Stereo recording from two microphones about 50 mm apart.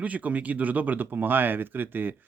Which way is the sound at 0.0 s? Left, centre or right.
Right.